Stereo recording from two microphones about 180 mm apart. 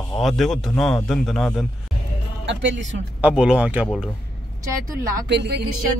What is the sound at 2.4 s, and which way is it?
Speech, 90° right.